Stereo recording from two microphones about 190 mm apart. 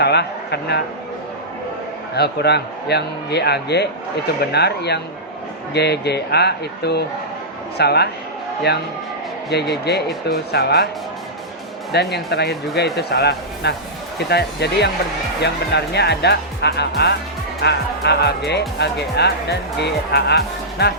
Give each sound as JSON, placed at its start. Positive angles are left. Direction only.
{"t": 0.0, "sound": "a sound", "side_deg": 60}
{"t": 2.1, "sound": "speech", "side_deg": 60}
{"t": 12.1, "sound": "speech", "side_deg": 60}